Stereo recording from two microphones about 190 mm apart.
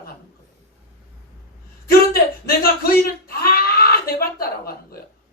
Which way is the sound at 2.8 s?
50° left (ahead or behind).